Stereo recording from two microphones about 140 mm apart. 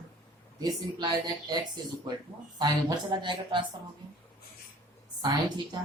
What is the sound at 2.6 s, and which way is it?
Speech, 30° right (ahead or behind).